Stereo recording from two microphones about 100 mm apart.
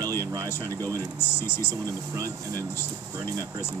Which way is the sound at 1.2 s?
25° left (ahead or behind).